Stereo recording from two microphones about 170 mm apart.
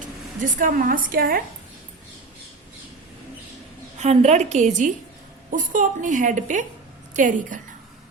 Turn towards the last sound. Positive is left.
turn(degrees=-50)  # may be behind; listen again after turning